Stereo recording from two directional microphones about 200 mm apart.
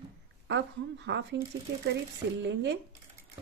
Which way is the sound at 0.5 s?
65° right (ahead or behind).